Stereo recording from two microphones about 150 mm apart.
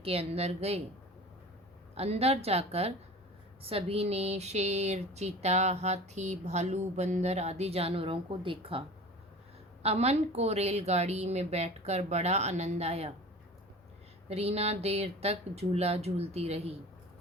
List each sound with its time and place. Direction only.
0.0 s speech: 40° right (ahead or behind)
2.0 s speech: 45° right (ahead or behind)
9.8 s speech: 45° right (ahead or behind)
14.3 s speech: 40° right (ahead or behind)